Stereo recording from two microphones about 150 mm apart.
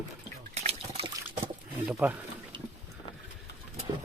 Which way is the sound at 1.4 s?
10° right (ahead or behind).